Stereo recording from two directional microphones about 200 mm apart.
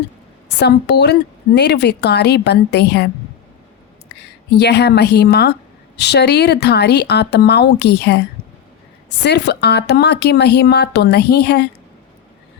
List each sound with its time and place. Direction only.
0.6 s a woman's voice: 55° left (ahead or behind)
4.5 s a woman's voice: 55° left (ahead or behind)
9.2 s a woman's voice: 55° left (ahead or behind)